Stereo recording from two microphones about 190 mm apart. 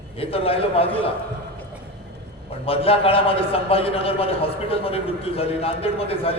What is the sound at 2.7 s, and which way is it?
A man's voice, 30° left (ahead or behind).